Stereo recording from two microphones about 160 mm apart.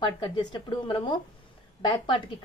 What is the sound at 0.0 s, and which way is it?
A woman's voice, 30° left (ahead or behind).